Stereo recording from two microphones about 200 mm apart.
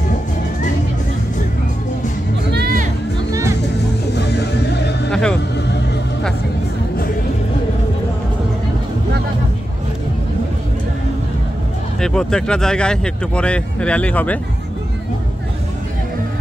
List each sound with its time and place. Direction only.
2.5 s music: 45° right (ahead or behind)
3.3 s music: 15° right (ahead or behind)
4.1 s music: 55° left (ahead or behind)
5.1 s music: 5° left (ahead or behind)
12.0 s speech: 5° left (ahead or behind)